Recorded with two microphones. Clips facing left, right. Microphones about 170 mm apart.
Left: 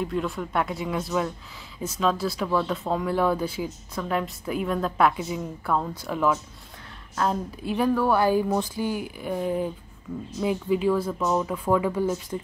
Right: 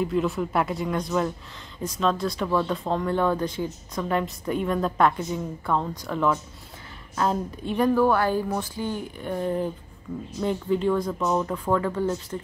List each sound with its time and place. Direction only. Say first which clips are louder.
0.0 s a woman's voice: right 3 dB; centre (ahead or behind)